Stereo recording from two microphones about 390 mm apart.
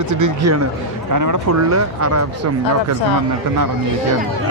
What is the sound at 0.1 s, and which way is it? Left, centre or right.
Speech, right.